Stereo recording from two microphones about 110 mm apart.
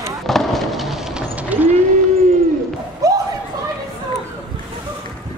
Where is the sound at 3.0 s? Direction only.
30° right (ahead or behind).